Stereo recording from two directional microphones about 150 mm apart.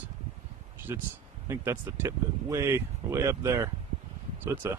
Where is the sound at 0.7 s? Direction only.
15° right (ahead or behind).